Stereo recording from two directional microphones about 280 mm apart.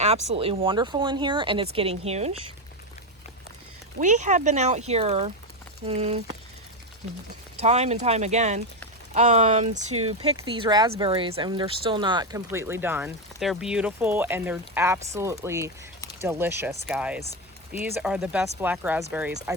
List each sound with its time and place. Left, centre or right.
0.0 s speech: right
4.0 s speech: right
7.6 s speech: right